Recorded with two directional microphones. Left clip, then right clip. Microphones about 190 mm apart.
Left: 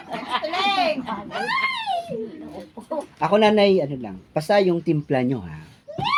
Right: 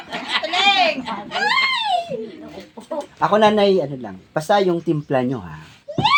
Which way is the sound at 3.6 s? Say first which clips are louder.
Right 1 dB; 5° right (ahead or behind).